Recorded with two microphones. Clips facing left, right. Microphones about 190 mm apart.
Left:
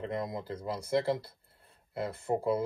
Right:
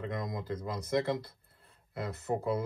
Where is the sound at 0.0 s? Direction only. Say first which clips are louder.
Left 2 dB; 30° left (ahead or behind).